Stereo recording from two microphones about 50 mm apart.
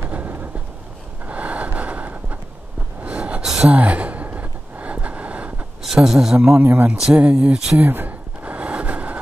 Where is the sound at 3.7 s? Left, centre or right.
Right.